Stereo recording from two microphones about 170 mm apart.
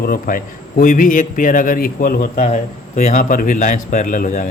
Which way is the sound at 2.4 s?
40° left (ahead or behind).